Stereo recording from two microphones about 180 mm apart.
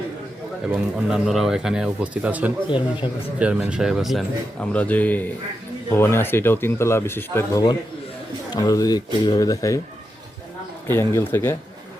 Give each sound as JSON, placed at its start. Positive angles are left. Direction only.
{"t": 0.9, "sound": "a man's voice", "side_deg": -5}
{"t": 2.6, "sound": "speech", "side_deg": 30}
{"t": 3.3, "sound": "a man's voice", "side_deg": -5}
{"t": 10.8, "sound": "speech", "side_deg": 10}